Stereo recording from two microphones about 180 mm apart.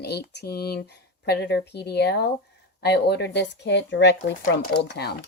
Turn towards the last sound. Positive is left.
turn(degrees=70)  # may be behind; listen again after turning